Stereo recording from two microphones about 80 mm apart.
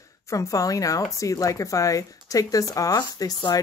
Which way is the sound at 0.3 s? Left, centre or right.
Left.